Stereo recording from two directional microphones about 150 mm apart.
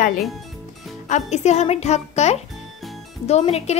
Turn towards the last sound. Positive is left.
turn(degrees=45)  # may be behind; listen again after turning